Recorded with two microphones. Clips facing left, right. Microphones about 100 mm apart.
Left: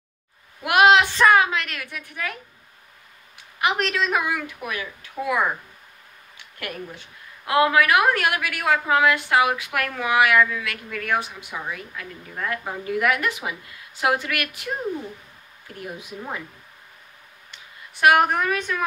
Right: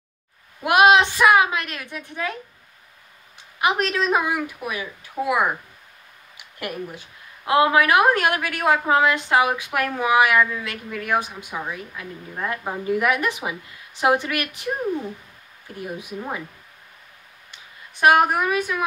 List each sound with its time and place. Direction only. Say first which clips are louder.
0.6 s a woman's voice: right 1 dB; 20° right (ahead or behind)
3.6 s a woman's voice: right 2 dB; 20° right (ahead or behind)
6.6 s a woman's voice: right 3 dB; 20° right (ahead or behind)
18.0 s speech: right 1 dB; 20° right (ahead or behind)